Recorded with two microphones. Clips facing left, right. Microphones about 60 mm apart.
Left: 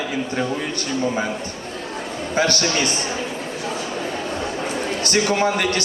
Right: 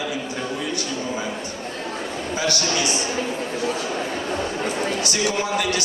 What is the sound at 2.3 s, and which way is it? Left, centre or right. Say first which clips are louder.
Speech: left 4 dB; left.